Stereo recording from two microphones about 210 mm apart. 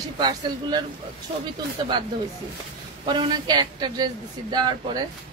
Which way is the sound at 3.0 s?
20° right (ahead or behind).